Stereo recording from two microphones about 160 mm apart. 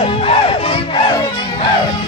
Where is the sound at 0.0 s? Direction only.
35° left (ahead or behind).